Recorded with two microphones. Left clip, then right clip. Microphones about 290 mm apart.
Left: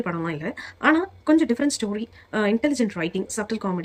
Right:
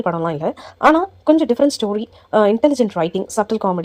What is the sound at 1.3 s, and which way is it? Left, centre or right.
A woman's voice, centre.